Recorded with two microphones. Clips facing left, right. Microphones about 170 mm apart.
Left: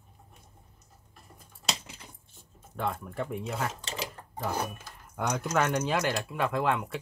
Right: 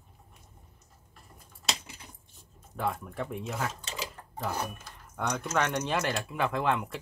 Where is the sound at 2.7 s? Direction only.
Centre (ahead or behind).